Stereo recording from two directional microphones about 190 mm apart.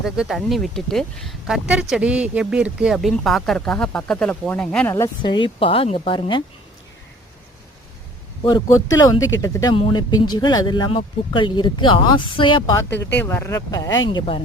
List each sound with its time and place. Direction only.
0.0 s speech: centre (ahead or behind); by 6.4 s 25° left (ahead or behind)
8.4 s speech: 20° left (ahead or behind)
12.7 s speech: 15° left (ahead or behind)